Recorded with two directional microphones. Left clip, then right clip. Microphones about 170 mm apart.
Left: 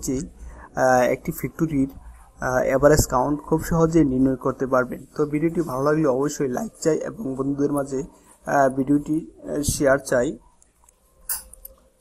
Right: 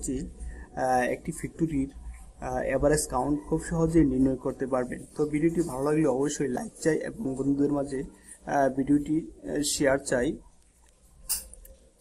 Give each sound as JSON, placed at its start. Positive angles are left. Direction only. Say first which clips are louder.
{"t": 0.0, "sound": "speech", "louder": "left 6 dB", "side_deg": 25}